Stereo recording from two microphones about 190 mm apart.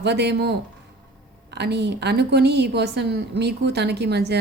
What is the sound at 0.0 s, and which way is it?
A woman's voice, 60° right (ahead or behind).